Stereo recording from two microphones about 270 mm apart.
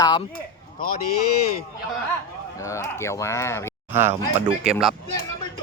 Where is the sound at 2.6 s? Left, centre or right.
Centre.